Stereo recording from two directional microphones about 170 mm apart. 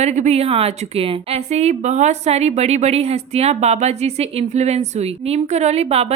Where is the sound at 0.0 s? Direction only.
40° right (ahead or behind).